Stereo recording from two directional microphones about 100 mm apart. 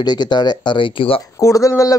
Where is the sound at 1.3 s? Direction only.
35° left (ahead or behind).